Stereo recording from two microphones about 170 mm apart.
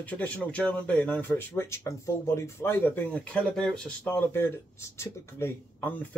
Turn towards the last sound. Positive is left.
turn(degrees=10)  # may be behind; listen again after turning